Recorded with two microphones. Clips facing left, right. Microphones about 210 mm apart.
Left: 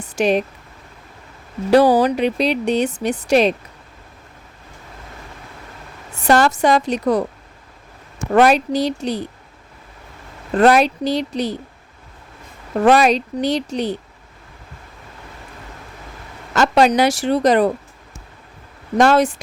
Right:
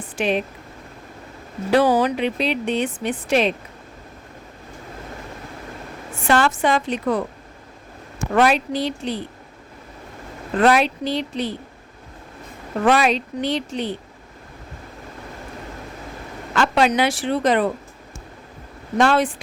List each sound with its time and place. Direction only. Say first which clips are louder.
0.2 s speech: left 5 dB; 40° left (ahead or behind)
1.7 s speech: left 4 dB; 35° left (ahead or behind)
6.2 s speech: left 4 dB; 40° left (ahead or behind)
8.3 s speech: left 4 dB; 40° left (ahead or behind)
10.6 s speech: left 4 dB; 40° left (ahead or behind)
12.8 s speech: left 4 dB; 40° left (ahead or behind)
16.6 s speech: left 4 dB; 40° left (ahead or behind)
18.9 s speech: left 4 dB; 40° left (ahead or behind)